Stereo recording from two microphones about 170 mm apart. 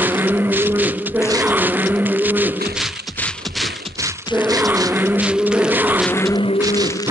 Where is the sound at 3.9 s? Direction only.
15° right (ahead or behind).